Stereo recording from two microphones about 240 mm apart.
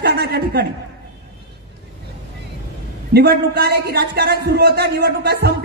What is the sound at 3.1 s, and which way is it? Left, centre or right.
Speech, right.